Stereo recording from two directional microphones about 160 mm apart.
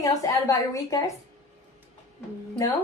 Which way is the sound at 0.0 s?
20° left (ahead or behind).